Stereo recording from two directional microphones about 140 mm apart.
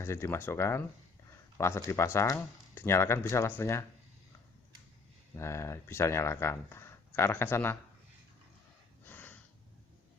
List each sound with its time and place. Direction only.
0.0 s speech: 20° left (ahead or behind)
5.3 s speech: 20° left (ahead or behind)
9.0 s snort: 15° left (ahead or behind)